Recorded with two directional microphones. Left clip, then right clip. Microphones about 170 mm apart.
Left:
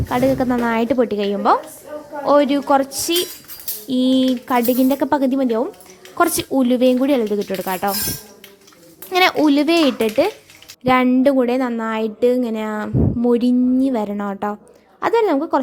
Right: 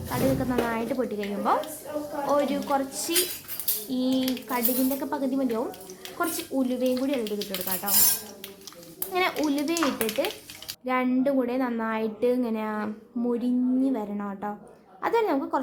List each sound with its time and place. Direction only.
0.1 s speech: 55° left (ahead or behind)
9.1 s speech: 60° left (ahead or behind)
11.1 s speech: 45° left (ahead or behind)
13.3 s speech: 50° left (ahead or behind)